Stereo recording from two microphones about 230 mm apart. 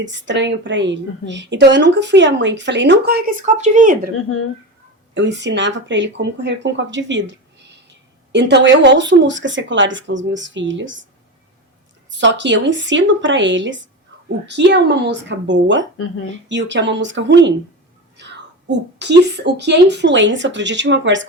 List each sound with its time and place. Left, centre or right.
0.0 s a woman's voice: right
3.4 s speech: right
4.1 s speech: left
5.1 s a woman's voice: right
12.2 s a woman's voice: right
18.2 s whispering: right
18.9 s a woman's voice: right